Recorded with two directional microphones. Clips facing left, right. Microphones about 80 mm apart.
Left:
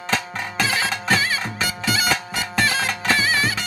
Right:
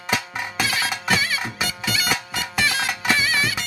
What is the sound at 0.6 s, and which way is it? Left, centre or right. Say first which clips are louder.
Music: left 2 dB; left.